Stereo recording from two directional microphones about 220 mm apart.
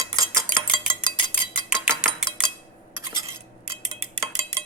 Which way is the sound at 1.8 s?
Centre (ahead or behind).